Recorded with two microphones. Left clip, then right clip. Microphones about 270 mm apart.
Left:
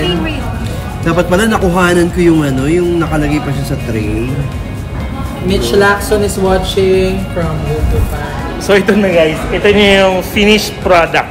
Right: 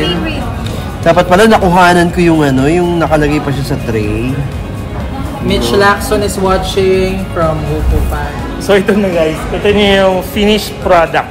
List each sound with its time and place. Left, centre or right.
1.0 s a man's voice: right
5.5 s speech: right
8.6 s speech: centre